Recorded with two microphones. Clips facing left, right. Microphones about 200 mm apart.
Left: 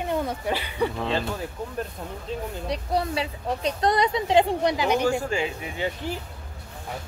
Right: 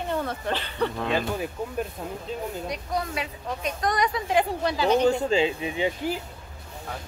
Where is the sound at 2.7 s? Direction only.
30° left (ahead or behind); by 5.2 s 10° left (ahead or behind).